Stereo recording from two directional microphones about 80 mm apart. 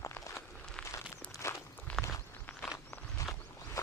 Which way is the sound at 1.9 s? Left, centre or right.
Centre.